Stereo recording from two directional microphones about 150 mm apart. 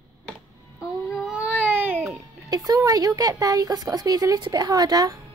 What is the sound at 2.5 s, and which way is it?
A woman's voice, 25° right (ahead or behind).